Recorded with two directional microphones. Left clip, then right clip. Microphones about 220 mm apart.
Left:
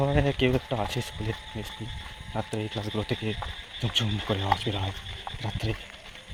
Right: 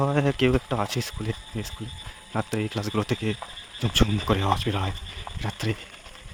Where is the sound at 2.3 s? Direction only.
30° right (ahead or behind).